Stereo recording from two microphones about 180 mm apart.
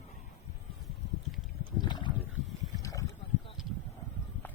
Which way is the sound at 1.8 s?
25° left (ahead or behind).